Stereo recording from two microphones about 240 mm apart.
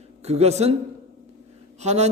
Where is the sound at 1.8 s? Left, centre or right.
Right.